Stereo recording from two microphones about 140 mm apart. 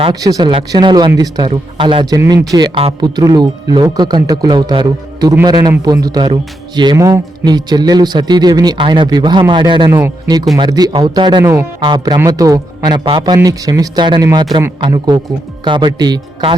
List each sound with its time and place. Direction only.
0.1 s a man's voice: 25° right (ahead or behind)
2.1 s a man's voice: 20° right (ahead or behind)